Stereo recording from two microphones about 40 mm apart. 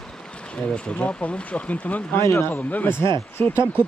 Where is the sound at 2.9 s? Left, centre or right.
Left.